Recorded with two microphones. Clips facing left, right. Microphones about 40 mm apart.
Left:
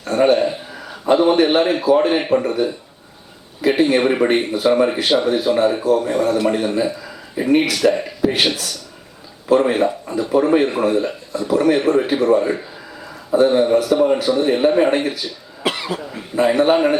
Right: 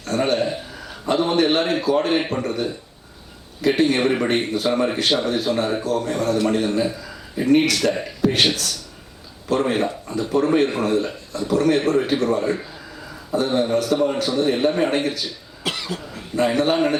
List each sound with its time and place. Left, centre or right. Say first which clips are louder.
0.0 s a man's voice: left 6 dB; centre
15.6 s speech: left 5 dB; centre